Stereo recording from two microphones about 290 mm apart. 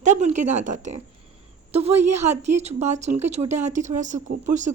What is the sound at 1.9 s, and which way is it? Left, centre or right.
Speech, right.